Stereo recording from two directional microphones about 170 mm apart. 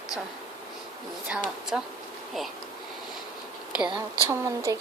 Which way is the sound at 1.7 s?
5° right (ahead or behind).